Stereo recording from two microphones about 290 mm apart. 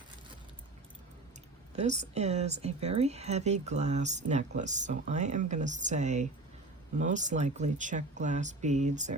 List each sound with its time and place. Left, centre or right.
1.7 s speech: right